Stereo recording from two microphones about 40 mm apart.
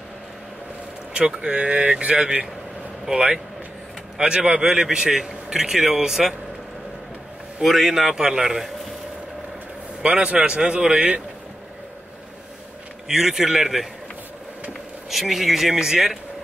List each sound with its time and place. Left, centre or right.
1.1 s speech: right
4.2 s a man's voice: right
7.6 s speech: centre
10.0 s speech: right
13.1 s a man's voice: centre
15.0 s speech: centre